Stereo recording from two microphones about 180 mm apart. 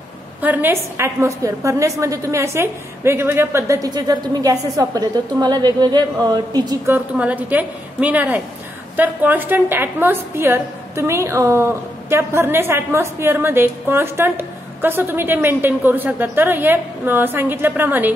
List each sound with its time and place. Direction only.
0.4 s a woman's voice: 10° right (ahead or behind)
7.2 s a woman's voice: 10° right (ahead or behind)